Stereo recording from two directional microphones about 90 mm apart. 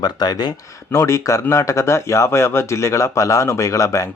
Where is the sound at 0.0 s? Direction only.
50° left (ahead or behind).